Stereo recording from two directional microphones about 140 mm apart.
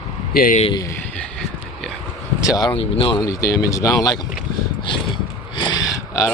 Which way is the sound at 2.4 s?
25° left (ahead or behind).